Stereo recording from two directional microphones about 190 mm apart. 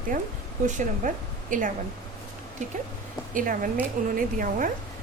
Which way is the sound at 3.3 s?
45° right (ahead or behind).